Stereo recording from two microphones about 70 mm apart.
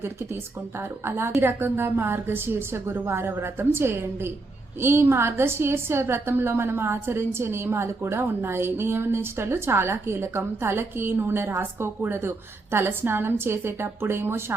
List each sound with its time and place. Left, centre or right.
0.8 s a woman's voice: right